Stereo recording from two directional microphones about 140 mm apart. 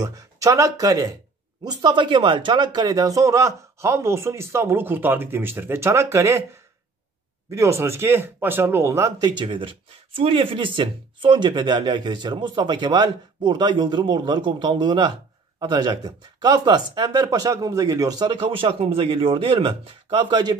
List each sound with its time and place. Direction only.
0.0 s speech: 25° right (ahead or behind)
7.5 s speech: 20° right (ahead or behind)
9.4 s speech: 35° right (ahead or behind)